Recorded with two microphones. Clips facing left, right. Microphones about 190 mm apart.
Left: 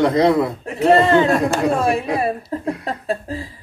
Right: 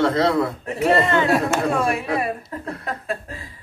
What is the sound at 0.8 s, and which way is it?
Speech, 30° left (ahead or behind).